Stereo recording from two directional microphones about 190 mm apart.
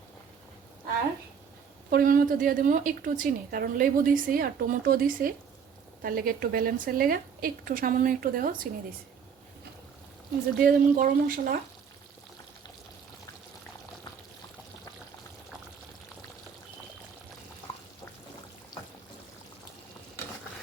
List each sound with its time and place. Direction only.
1.9 s a woman's voice: 50° right (ahead or behind)
10.6 s a woman's voice: 45° right (ahead or behind)